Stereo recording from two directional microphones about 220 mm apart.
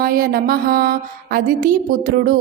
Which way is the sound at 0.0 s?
40° right (ahead or behind).